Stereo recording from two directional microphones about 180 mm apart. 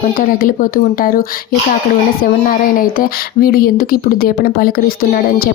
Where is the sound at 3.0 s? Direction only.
55° left (ahead or behind).